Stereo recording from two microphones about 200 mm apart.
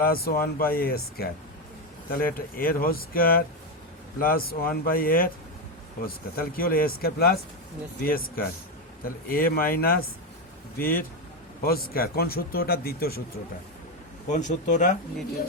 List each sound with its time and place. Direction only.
0.0 s speech: 50° left (ahead or behind)
6.3 s speech: 45° left (ahead or behind)
14.3 s speech: 35° left (ahead or behind)